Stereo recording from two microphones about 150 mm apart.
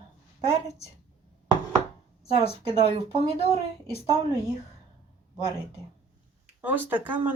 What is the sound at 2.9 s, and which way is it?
Speech, 45° right (ahead or behind).